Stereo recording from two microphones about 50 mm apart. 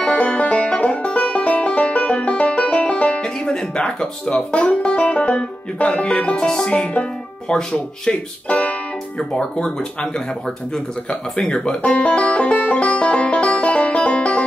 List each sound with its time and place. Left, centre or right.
0.0 s music: left
7.5 s speech: centre
11.1 s speech: centre
11.8 s music: left